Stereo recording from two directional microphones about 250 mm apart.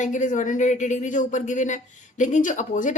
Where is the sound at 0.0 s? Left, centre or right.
Left.